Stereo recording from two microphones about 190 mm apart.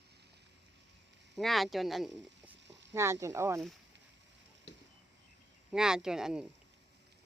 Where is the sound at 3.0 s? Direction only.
15° right (ahead or behind).